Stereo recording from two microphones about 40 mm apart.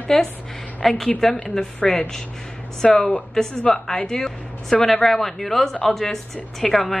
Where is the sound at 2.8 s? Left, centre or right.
Centre.